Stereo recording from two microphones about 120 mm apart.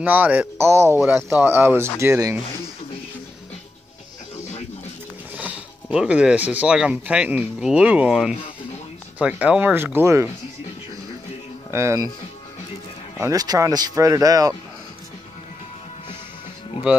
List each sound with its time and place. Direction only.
0.0 s speech: 15° right (ahead or behind)
5.3 s speech: 10° right (ahead or behind)
11.7 s speech: 25° right (ahead or behind)
13.2 s speech: 30° right (ahead or behind)